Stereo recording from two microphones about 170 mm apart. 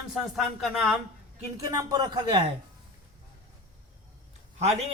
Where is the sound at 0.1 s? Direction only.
Centre (ahead or behind).